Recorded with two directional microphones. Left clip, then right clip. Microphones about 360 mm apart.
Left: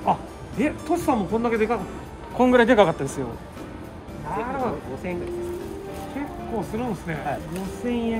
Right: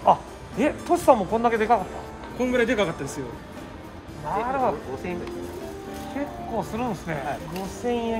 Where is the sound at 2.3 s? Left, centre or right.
Centre.